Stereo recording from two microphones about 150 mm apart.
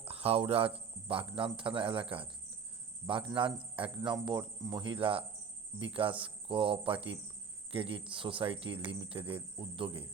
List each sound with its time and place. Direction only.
0.0 s speech: 40° right (ahead or behind)
3.3 s speech: 35° right (ahead or behind)